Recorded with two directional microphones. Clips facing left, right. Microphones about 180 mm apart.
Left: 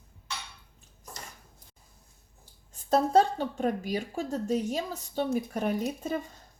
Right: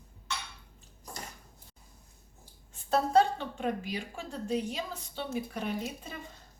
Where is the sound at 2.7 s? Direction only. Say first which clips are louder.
Left 3 dB; 40° left (ahead or behind).